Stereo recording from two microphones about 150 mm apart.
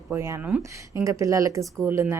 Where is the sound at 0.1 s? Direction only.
20° right (ahead or behind).